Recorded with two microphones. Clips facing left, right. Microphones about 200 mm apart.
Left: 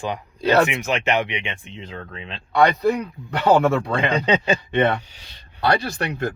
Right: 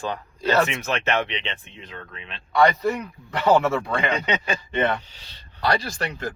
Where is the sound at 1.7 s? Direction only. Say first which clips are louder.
Left 5 dB; 30° left (ahead or behind).